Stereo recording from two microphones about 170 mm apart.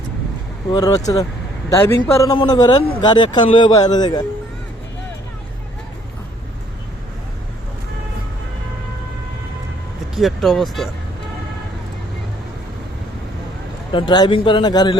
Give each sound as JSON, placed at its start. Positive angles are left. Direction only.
{"t": 0.7, "sound": "a man's voice", "side_deg": 25}
{"t": 10.2, "sound": "speech", "side_deg": 0}
{"t": 13.9, "sound": "a man's voice", "side_deg": 25}